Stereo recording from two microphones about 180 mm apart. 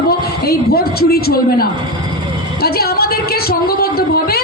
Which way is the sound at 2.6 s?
60° left (ahead or behind).